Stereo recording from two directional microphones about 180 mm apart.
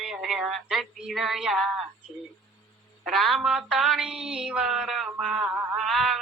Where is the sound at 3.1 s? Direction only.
Centre (ahead or behind).